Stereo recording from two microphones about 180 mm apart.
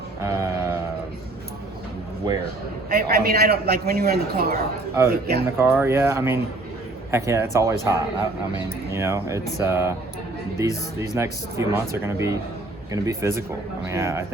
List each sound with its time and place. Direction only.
0.3 s a sound: 15° right (ahead or behind)
2.9 s a man's voice: 60° right (ahead or behind)
5.5 s speech: 15° right (ahead or behind)
11.0 s speech: 15° right (ahead or behind)